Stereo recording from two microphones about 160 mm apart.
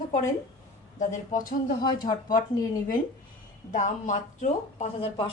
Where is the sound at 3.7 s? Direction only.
50° left (ahead or behind).